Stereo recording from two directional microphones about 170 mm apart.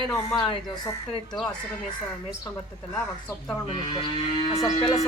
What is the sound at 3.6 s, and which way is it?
Speech, 30° left (ahead or behind).